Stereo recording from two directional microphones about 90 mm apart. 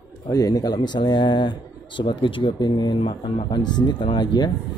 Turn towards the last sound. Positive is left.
turn(degrees=55)  # may be behind; listen again after turning